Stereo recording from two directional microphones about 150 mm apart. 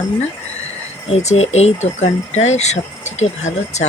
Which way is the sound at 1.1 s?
45° left (ahead or behind).